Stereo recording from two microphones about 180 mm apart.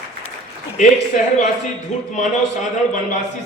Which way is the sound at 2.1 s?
45° left (ahead or behind).